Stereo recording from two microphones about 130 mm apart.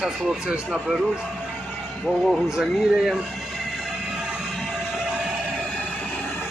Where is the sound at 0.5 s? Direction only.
10° right (ahead or behind).